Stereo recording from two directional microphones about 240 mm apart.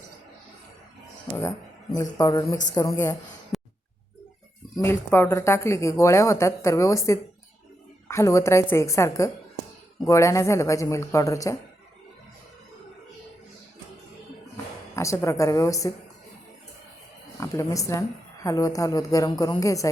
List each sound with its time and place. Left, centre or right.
1.3 s a woman's voice: centre
3.5 s a sound: centre
4.8 s a woman's voice: centre
14.5 s speech: centre
17.4 s a woman's voice: centre